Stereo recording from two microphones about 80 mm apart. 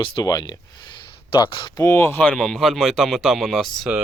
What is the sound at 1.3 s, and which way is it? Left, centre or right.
Speech, left.